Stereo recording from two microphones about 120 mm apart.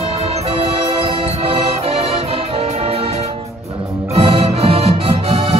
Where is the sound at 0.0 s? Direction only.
55° right (ahead or behind).